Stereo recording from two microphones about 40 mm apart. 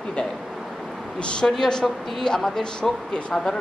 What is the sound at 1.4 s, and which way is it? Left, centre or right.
Speech, left.